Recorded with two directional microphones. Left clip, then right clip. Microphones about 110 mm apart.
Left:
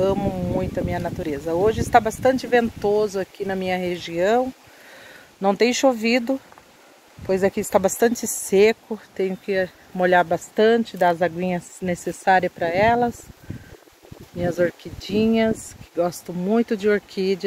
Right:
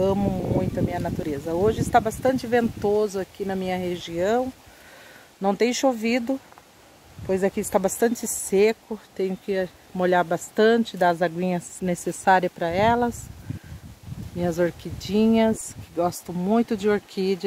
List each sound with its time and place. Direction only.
0.6 s speech: 20° right (ahead or behind)
2.8 s speech: 50° right (ahead or behind)
3.2 s speech: 30° right (ahead or behind)
5.4 s speech: 20° right (ahead or behind)
8.5 s speech: 5° right (ahead or behind)
9.1 s speech: 30° right (ahead or behind)
11.9 s speech: 50° right (ahead or behind)
12.5 s speech: 25° right (ahead or behind)
14.4 s speech: 25° right (ahead or behind)
15.0 s speech: 35° right (ahead or behind)
16.0 s speech: 20° right (ahead or behind)